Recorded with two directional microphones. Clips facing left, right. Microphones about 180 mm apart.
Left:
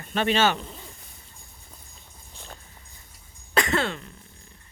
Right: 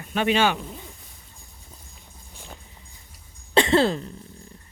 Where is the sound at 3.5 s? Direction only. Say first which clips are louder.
Right 6 dB; 30° right (ahead or behind).